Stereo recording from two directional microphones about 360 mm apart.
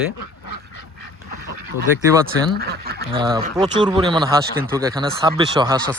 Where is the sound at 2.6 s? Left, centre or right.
Right.